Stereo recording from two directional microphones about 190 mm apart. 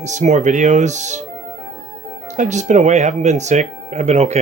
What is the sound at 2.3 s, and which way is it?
Speech, 40° right (ahead or behind).